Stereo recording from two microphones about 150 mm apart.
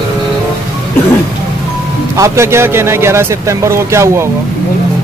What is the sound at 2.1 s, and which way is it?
Speech, 20° right (ahead or behind).